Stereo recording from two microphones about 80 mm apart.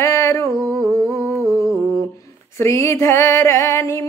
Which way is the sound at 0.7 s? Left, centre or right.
Centre.